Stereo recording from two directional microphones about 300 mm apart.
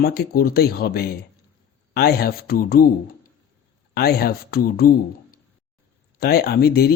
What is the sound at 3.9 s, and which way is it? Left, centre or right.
Speech, left.